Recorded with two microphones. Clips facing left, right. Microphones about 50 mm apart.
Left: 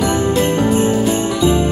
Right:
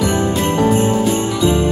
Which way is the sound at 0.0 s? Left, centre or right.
Centre.